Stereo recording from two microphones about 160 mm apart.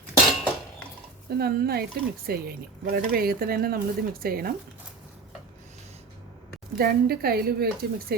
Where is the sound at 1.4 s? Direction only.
75° right (ahead or behind).